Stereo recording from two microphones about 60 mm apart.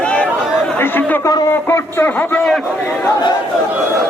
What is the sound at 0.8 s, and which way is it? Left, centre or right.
Chatter, left.